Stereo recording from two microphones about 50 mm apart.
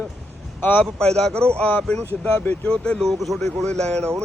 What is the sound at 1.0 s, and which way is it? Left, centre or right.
Speech, centre.